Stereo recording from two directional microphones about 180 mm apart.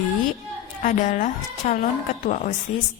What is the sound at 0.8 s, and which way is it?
A woman's voice, 45° left (ahead or behind).